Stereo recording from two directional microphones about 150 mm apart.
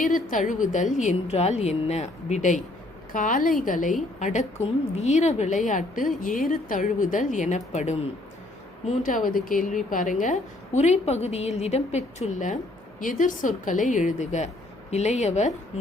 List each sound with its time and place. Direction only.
0.0 s a woman's voice: 60° left (ahead or behind)
3.1 s a woman's voice: 60° left (ahead or behind)
8.9 s a woman's voice: 60° left (ahead or behind)